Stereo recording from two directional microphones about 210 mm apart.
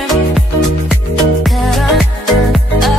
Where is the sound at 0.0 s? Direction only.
Centre (ahead or behind).